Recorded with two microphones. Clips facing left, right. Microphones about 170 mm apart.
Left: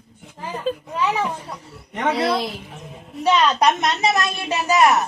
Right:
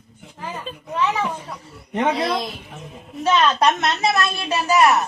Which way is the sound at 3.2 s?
15° left (ahead or behind).